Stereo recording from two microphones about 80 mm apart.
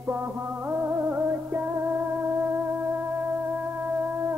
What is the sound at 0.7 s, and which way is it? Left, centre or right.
Music, right.